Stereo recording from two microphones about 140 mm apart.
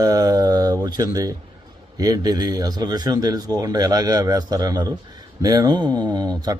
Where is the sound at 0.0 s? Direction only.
25° right (ahead or behind).